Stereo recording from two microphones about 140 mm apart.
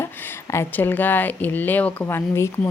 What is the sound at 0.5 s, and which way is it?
Speech, 15° left (ahead or behind).